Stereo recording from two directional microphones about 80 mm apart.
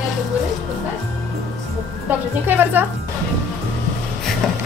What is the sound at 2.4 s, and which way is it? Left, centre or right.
Speech, right.